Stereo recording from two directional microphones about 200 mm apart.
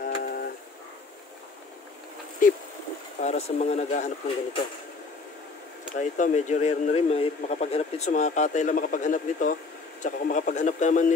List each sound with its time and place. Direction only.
0.0 s a sound: 50° left (ahead or behind)
3.2 s speech: 35° left (ahead or behind)
5.9 s speech: 40° left (ahead or behind)